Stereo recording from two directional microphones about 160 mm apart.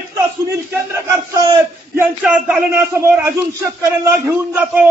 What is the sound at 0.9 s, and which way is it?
Speech, 20° right (ahead or behind).